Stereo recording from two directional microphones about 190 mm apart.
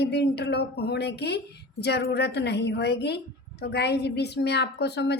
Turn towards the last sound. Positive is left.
turn(degrees=60)  # may be behind; listen again after turning